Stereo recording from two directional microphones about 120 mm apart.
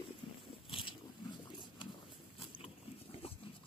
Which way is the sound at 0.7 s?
45° left (ahead or behind).